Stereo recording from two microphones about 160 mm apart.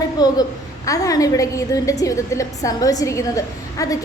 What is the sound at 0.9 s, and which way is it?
A woman's voice, 20° left (ahead or behind).